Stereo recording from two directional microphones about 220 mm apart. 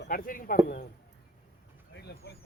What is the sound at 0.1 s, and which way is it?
Speech, 40° left (ahead or behind).